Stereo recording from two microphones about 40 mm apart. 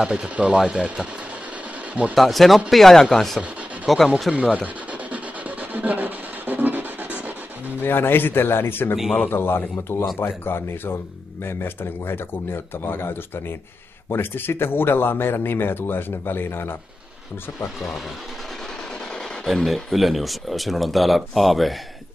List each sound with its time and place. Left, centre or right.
0.0 s speech: right
2.1 s speech: centre
3.3 s a sound: centre
4.4 s speech: right
5.1 s rub: right
7.8 s speech: left
10.1 s speech: left
14.1 s speech: left
19.4 s speech: centre